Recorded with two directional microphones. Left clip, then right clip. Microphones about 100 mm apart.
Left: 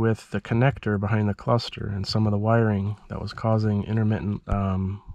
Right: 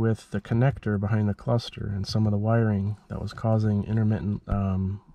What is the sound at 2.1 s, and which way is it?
Speech, 10° left (ahead or behind).